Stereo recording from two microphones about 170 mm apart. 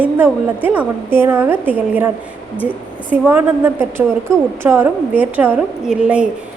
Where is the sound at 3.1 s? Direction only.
10° right (ahead or behind).